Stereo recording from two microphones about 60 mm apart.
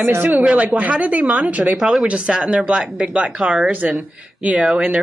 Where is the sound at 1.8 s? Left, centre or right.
Centre.